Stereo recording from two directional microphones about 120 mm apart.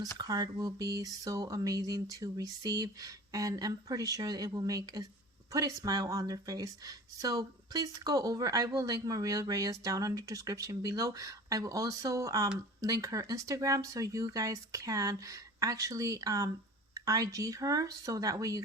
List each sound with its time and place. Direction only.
0.0 s speech: 35° right (ahead or behind)